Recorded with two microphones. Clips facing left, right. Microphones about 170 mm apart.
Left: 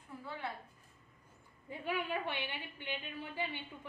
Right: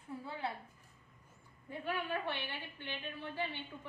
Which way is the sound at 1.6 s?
15° left (ahead or behind).